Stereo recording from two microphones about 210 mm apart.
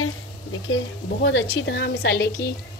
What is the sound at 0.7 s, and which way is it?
A woman's voice, 55° left (ahead or behind).